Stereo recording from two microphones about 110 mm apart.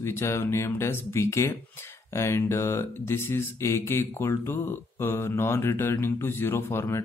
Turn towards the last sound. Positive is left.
turn(degrees=20)  # may be behind; listen again after turning